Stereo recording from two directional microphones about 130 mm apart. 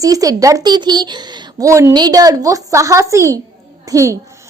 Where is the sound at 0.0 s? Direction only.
25° right (ahead or behind).